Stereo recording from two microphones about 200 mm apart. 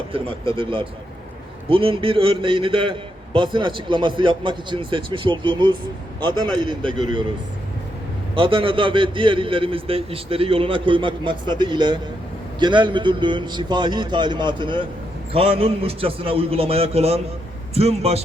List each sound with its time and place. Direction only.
0.1 s a man's voice: 25° right (ahead or behind)
8.4 s a man's voice: 25° right (ahead or behind)